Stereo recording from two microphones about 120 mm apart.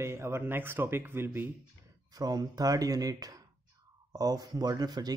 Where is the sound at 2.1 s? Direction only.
30° right (ahead or behind).